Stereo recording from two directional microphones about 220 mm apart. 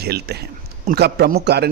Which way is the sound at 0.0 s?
45° right (ahead or behind).